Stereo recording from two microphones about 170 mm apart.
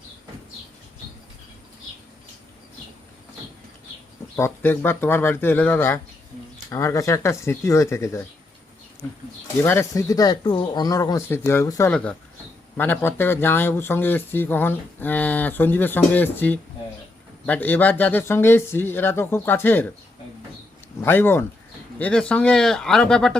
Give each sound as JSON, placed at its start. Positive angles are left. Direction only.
{"t": 4.4, "sound": "speech", "side_deg": 15}
{"t": 9.6, "sound": "speech", "side_deg": 10}
{"t": 11.9, "sound": "speech", "side_deg": 5}
{"t": 21.0, "sound": "speech", "side_deg": 15}